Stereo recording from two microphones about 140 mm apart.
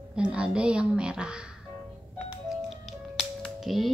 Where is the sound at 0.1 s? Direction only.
5° right (ahead or behind).